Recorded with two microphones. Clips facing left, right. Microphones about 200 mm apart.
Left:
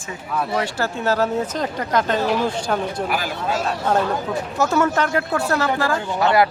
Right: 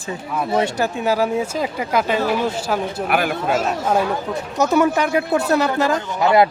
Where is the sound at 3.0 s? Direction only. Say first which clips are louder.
Right 4 dB; 60° right (ahead or behind).